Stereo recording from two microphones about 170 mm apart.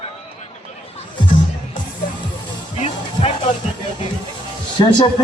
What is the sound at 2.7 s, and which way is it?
Music, 40° left (ahead or behind).